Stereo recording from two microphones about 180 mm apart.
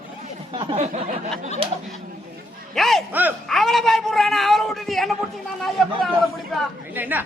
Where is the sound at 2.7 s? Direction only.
Centre (ahead or behind).